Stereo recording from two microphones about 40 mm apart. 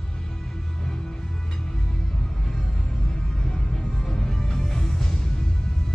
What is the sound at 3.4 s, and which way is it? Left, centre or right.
Music, centre.